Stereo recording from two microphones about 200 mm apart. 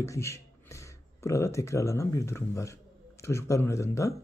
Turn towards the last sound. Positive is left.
turn(degrees=15)  # may be behind; listen again after turning